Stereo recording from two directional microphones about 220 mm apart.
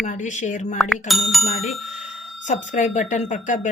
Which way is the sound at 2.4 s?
35° left (ahead or behind).